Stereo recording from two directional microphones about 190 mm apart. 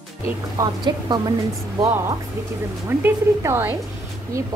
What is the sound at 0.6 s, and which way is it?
Speech, 20° right (ahead or behind).